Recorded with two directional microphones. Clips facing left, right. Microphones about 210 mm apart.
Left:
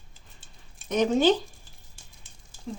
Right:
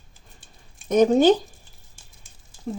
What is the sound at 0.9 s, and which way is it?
Speech, 45° right (ahead or behind).